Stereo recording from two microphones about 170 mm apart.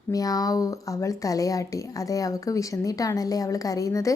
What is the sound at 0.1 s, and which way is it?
A woman's voice, 20° left (ahead or behind).